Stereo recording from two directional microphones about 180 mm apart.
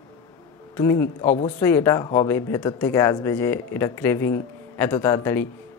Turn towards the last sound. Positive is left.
turn(degrees=10)  # may be behind; listen again after turning